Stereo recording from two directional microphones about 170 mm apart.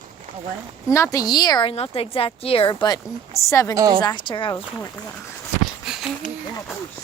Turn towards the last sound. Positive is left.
turn(degrees=0)  # may be behind; listen again after turning